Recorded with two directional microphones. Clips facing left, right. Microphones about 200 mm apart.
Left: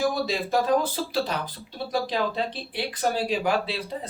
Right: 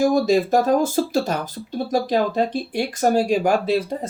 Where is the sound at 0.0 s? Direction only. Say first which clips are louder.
Right 9 dB; 45° right (ahead or behind).